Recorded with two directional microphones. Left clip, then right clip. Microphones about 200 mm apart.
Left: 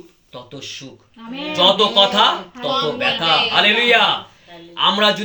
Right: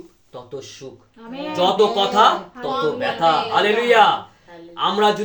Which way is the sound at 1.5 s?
20° right (ahead or behind).